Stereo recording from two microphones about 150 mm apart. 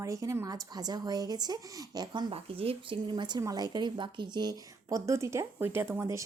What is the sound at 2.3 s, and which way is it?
A woman's voice, 40° right (ahead or behind).